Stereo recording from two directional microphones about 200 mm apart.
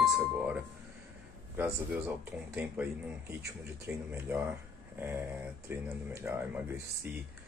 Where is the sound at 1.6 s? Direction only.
10° right (ahead or behind).